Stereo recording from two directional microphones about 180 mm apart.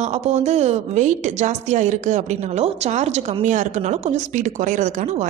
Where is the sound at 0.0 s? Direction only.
40° right (ahead or behind).